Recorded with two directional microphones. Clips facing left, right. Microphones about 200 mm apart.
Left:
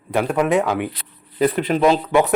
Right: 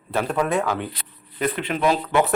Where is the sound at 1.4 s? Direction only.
35° left (ahead or behind).